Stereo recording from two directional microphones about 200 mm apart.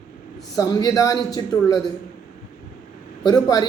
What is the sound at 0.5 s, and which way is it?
Speech, 20° left (ahead or behind).